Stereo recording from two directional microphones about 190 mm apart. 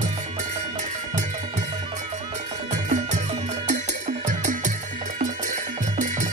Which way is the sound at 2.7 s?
40° right (ahead or behind).